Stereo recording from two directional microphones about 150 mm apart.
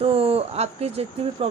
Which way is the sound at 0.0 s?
40° right (ahead or behind).